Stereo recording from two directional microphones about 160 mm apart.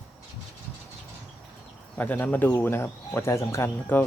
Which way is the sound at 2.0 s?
10° left (ahead or behind).